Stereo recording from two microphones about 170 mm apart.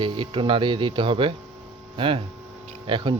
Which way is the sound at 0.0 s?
30° right (ahead or behind).